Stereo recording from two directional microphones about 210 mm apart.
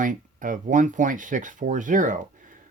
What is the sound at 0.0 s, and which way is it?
Speech, 40° right (ahead or behind).